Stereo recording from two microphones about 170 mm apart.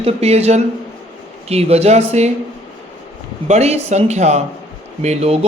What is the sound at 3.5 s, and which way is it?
Speech, 40° right (ahead or behind).